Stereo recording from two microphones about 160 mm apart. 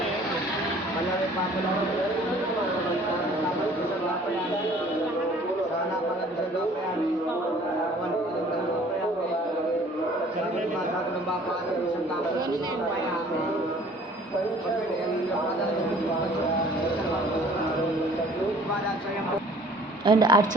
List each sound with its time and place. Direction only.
20.1 s a woman's voice: 25° right (ahead or behind)